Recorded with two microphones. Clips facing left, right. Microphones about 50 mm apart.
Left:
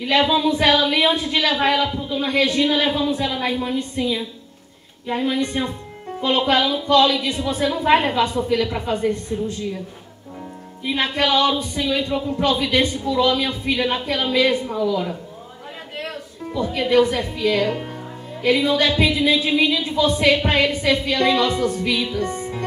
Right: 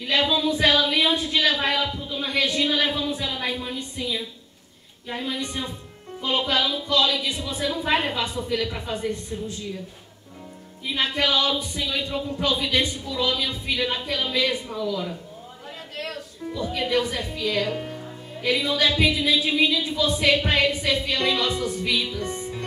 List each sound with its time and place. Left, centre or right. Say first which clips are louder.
0.0 s a woman's voice: left 5 dB; left
5.2 s a woman's voice: left 8 dB; left
9.3 s speech: left 7 dB; left
10.8 s a woman's voice: left 4 dB; left
12.7 s a woman's voice: left 6 dB; left
14.6 s speech: left 7 dB; left
16.5 s a woman's voice: left 7 dB; left
20.2 s a woman's voice: left 1 dB; left